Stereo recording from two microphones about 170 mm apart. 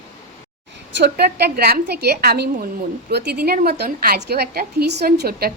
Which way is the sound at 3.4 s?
60° right (ahead or behind).